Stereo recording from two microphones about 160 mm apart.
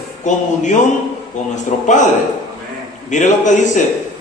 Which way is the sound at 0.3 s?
50° left (ahead or behind).